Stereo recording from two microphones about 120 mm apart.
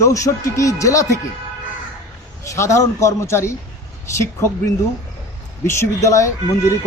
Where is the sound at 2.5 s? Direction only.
25° left (ahead or behind).